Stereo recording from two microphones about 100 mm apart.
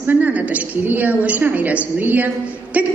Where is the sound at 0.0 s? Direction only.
15° right (ahead or behind).